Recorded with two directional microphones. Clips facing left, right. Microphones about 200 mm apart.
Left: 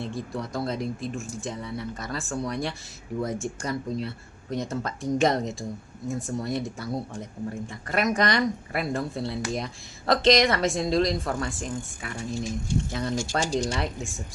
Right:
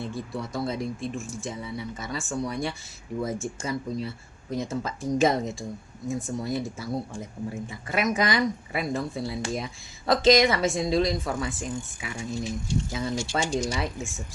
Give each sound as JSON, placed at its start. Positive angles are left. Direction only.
{"t": 0.0, "sound": "speech", "side_deg": 0}
{"t": 13.4, "sound": "speech", "side_deg": 35}
{"t": 13.7, "sound": "speech", "side_deg": 0}